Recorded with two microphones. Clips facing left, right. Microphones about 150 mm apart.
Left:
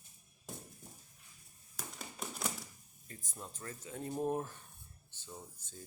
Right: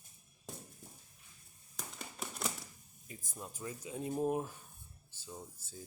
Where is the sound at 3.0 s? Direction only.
10° right (ahead or behind).